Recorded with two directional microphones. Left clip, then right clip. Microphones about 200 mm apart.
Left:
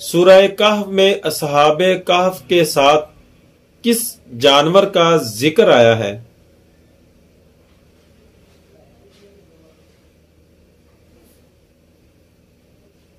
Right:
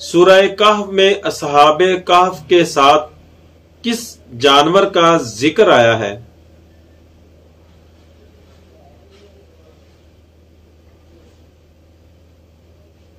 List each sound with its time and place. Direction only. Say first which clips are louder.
0.1 s speech: even; 45° left (ahead or behind)